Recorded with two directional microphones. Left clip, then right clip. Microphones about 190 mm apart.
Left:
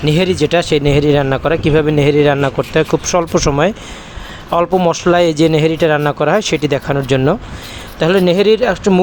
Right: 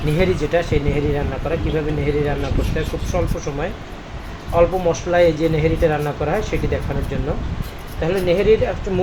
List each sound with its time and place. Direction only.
0.0 s a man's voice: 40° left (ahead or behind)